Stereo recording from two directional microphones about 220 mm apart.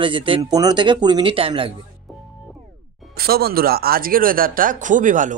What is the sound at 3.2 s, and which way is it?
Speech, 45° right (ahead or behind).